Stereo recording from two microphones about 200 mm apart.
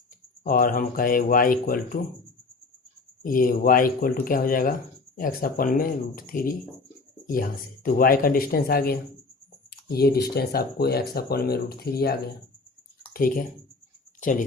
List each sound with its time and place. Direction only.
0.4 s speech: 45° left (ahead or behind)
3.2 s speech: 45° left (ahead or behind)
7.9 s speech: 45° left (ahead or behind)
9.6 s a sound: 50° left (ahead or behind)
10.3 s speech: 50° left (ahead or behind)
13.1 s speech: 45° left (ahead or behind)